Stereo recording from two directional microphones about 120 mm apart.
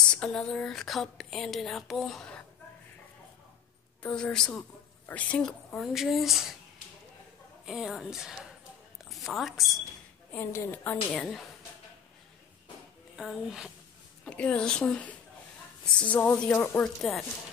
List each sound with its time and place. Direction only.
0.1 s speech: 10° left (ahead or behind)
4.0 s a woman's voice: 5° left (ahead or behind)
7.6 s a woman's voice: 5° right (ahead or behind)
10.3 s a woman's voice: 20° left (ahead or behind)
11.1 s speech: centre (ahead or behind)
13.1 s speech: 5° right (ahead or behind)
14.2 s a woman's voice: 10° left (ahead or behind)
17.0 s speech: centre (ahead or behind)